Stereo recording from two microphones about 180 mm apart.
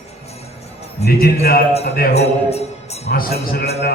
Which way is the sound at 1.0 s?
60° left (ahead or behind).